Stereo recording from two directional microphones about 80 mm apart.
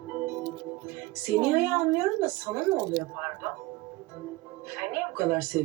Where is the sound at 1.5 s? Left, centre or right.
Right.